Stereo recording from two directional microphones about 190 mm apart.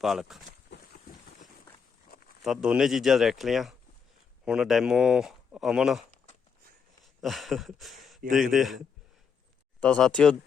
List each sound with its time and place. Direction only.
0.0 s speech: centre (ahead or behind)
2.1 s a sound: 50° left (ahead or behind)
2.4 s speech: centre (ahead or behind)
9.8 s speech: 5° left (ahead or behind)